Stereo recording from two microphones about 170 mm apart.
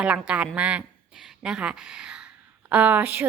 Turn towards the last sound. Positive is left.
turn(degrees=-10)  # may be behind; listen again after turning